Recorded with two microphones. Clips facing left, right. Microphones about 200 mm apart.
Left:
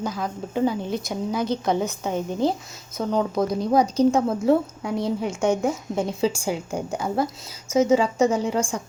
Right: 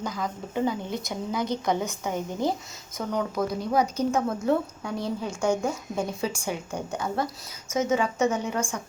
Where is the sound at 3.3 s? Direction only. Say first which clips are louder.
Left 4 dB; 35° left (ahead or behind).